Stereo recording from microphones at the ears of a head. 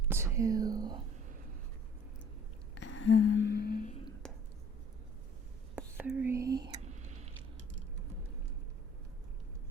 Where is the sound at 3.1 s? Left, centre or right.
Left.